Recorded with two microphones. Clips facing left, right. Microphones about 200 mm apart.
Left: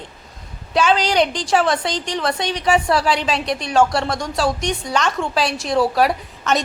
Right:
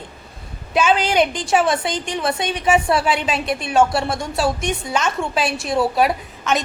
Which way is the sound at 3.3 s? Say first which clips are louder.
Even; 5° right (ahead or behind).